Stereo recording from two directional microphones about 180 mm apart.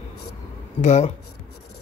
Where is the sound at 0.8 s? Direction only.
35° left (ahead or behind).